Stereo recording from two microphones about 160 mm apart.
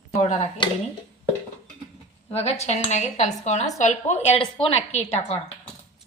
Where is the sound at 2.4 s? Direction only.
40° left (ahead or behind).